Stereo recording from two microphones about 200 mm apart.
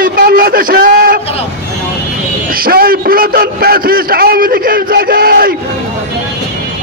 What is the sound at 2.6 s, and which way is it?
A man's voice, 45° right (ahead or behind).